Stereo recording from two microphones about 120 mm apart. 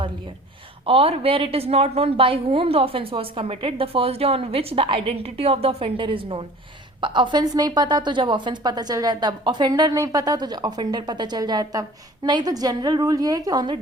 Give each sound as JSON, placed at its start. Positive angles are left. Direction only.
{"t": 0.9, "sound": "a woman's voice", "side_deg": -50}